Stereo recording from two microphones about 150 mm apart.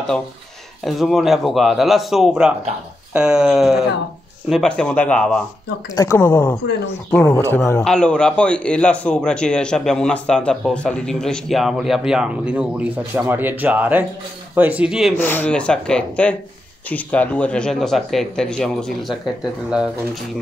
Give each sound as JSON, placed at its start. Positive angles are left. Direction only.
{"t": 0.8, "sound": "a man's voice", "side_deg": 0}
{"t": 7.3, "sound": "speech", "side_deg": 15}
{"t": 7.8, "sound": "a man's voice", "side_deg": 5}
{"t": 15.1, "sound": "a man's voice", "side_deg": 15}